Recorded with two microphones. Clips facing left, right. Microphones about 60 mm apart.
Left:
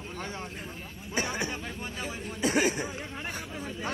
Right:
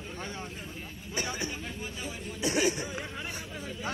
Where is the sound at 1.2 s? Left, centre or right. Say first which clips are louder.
Left 3 dB; left.